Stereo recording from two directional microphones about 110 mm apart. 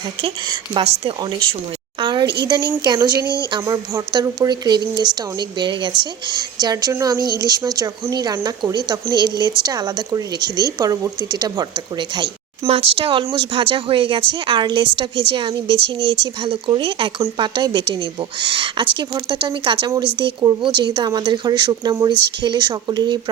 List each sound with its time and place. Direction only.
0.2 s a woman's voice: 50° right (ahead or behind)
12.6 s a woman's voice: 60° right (ahead or behind); by 23.2 s 40° right (ahead or behind)